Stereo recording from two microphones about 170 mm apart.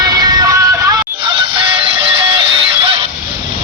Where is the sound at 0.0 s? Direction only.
25° right (ahead or behind).